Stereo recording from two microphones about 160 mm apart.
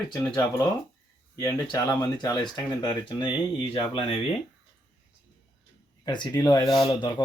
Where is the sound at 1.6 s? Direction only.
20° left (ahead or behind).